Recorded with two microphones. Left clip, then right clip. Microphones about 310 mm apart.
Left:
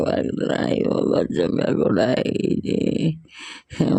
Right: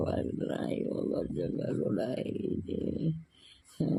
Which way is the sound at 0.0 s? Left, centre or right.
Left.